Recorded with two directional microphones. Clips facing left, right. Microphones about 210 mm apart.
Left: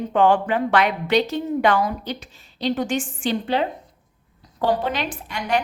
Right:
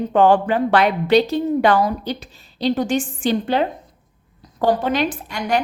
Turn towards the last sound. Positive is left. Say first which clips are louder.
# right 2 dB
turn(degrees=-45)  # may be behind; listen again after turning